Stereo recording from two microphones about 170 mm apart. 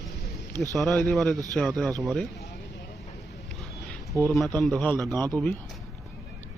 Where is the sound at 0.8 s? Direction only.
5° left (ahead or behind).